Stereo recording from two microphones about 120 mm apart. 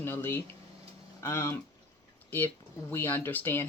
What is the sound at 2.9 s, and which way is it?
Speech, 20° left (ahead or behind).